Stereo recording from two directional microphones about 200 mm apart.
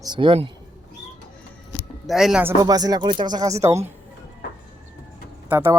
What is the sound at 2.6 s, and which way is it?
Speech, 20° right (ahead or behind).